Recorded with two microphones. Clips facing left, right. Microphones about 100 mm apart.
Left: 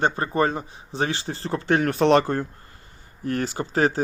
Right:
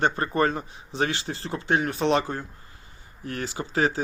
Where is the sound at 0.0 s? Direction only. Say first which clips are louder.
Left 1 dB; 25° left (ahead or behind).